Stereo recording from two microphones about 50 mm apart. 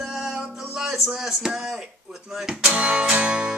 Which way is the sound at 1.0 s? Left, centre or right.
Centre.